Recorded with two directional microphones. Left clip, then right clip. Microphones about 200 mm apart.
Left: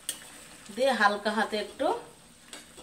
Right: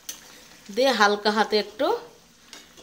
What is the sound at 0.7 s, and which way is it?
Speech, 55° right (ahead or behind).